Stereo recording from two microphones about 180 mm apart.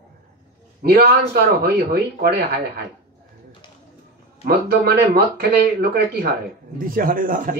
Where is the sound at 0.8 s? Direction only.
60° right (ahead or behind).